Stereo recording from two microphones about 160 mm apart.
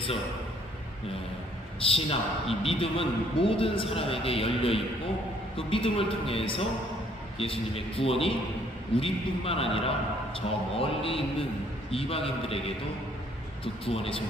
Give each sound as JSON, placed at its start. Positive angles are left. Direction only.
{"t": 1.8, "sound": "a man's voice", "side_deg": 35}
{"t": 13.8, "sound": "a man's voice", "side_deg": 35}